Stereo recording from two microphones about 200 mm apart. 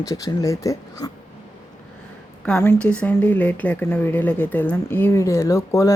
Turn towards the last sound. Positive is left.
turn(degrees=15)  # may be behind; listen again after turning